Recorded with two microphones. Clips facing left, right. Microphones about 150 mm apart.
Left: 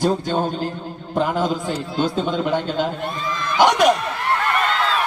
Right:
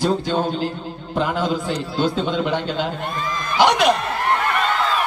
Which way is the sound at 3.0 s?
45° right (ahead or behind).